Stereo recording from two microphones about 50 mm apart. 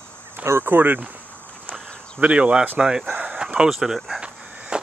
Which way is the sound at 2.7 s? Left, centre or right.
Centre.